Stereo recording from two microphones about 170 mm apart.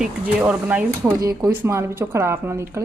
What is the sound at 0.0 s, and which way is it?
Speech, 5° right (ahead or behind).